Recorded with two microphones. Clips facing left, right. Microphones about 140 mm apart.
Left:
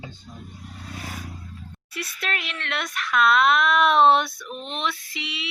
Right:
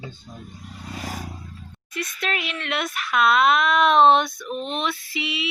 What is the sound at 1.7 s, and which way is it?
Speech, 5° left (ahead or behind).